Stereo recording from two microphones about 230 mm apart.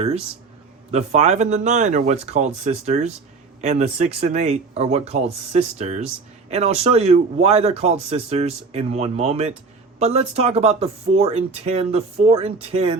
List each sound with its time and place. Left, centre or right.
0.9 s speech: right